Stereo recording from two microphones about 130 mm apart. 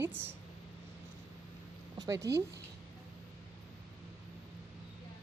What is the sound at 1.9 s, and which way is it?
Speech, 25° right (ahead or behind).